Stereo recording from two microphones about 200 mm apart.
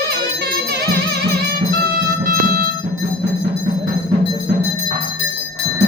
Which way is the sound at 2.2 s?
45° right (ahead or behind).